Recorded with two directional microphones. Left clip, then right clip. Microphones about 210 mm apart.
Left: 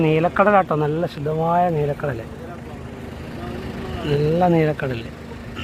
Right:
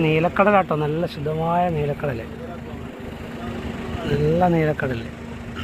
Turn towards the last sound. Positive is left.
turn(degrees=10)  # may be behind; listen again after turning